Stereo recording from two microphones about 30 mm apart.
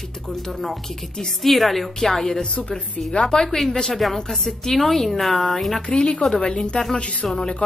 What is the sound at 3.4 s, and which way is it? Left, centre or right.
Music, centre.